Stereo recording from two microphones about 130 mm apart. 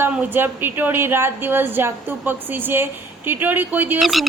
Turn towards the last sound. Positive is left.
turn(degrees=0)  # may be behind; listen again after turning